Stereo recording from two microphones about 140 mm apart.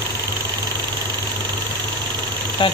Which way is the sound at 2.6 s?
35° left (ahead or behind).